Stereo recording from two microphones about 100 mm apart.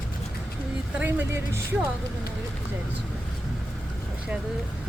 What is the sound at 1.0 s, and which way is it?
Speech, 20° right (ahead or behind).